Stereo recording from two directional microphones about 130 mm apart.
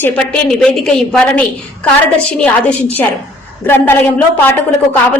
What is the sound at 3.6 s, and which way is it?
A woman's voice, 15° left (ahead or behind).